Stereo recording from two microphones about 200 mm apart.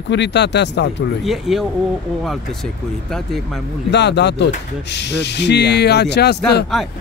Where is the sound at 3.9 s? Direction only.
60° left (ahead or behind).